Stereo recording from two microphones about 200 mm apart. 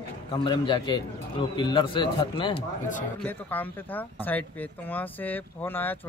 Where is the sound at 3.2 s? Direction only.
10° left (ahead or behind).